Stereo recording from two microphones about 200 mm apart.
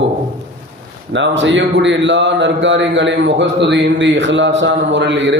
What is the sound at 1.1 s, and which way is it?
Speech, 65° right (ahead or behind).